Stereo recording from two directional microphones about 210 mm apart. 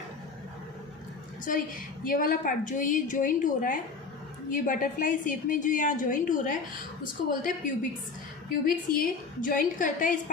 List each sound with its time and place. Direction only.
2.0 s a woman's voice: 40° left (ahead or behind)